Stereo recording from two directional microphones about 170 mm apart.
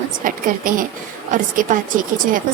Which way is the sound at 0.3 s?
55° right (ahead or behind).